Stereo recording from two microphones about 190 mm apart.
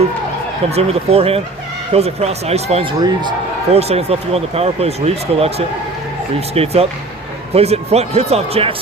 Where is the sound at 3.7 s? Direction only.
35° right (ahead or behind).